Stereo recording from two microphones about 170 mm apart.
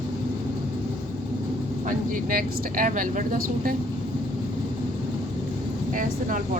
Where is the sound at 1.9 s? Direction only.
55° right (ahead or behind).